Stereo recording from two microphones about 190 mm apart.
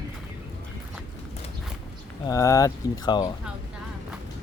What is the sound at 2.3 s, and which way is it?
Speech, 15° left (ahead or behind).